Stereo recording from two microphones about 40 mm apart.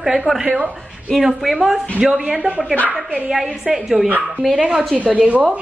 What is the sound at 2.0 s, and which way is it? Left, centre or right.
Speech, centre.